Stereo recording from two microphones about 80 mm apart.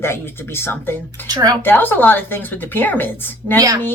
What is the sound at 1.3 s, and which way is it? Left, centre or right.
Speech, right.